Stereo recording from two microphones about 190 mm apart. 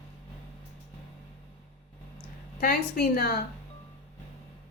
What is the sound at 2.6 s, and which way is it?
Speech, 50° left (ahead or behind).